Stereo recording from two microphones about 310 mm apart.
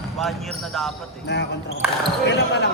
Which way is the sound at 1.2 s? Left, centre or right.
Left.